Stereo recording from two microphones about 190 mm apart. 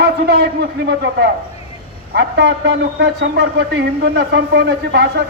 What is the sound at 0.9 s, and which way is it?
A man's voice, 65° right (ahead or behind).